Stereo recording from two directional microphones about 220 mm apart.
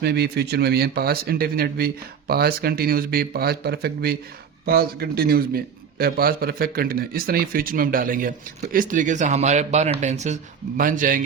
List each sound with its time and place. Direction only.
0.0 s a man's voice: 45° right (ahead or behind)